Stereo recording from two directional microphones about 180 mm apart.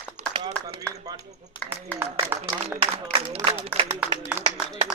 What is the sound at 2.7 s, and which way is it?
Speech, 35° right (ahead or behind).